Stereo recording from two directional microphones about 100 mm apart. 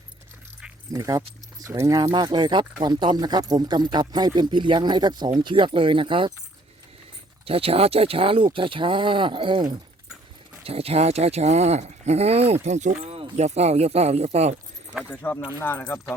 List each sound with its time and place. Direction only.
0.9 s speech: 35° right (ahead or behind); by 6.3 s 55° right (ahead or behind)
7.4 s speech: 70° right (ahead or behind); by 9.6 s 55° right (ahead or behind)
10.6 s speech: 80° right
13.1 s speech: 75° right (ahead or behind)
15.2 s speech: 20° left (ahead or behind)